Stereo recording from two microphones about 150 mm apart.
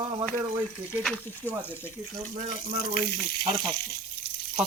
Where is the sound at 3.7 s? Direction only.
90° left.